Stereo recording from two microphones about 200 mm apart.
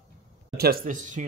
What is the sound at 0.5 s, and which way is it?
Speech, 50° right (ahead or behind).